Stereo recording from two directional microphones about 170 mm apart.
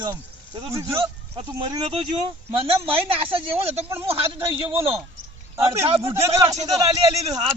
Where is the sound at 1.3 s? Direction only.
25° right (ahead or behind).